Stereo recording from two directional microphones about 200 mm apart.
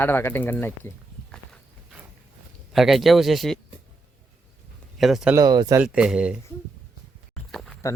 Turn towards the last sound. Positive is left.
turn(degrees=0)  # may be behind; listen again after turning